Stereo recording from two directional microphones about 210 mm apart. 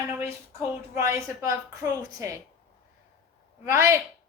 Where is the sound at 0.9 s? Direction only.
15° right (ahead or behind).